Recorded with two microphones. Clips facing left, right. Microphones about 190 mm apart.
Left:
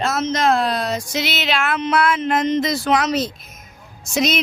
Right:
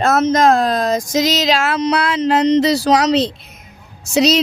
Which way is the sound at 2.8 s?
35° right (ahead or behind).